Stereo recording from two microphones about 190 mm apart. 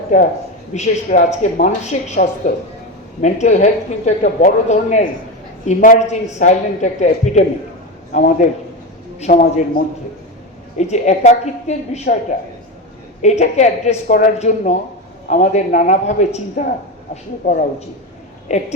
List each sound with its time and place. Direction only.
0.7 s a man's voice: 40° left (ahead or behind)
10.8 s speech: 35° left (ahead or behind)
13.2 s a man's voice: 40° left (ahead or behind)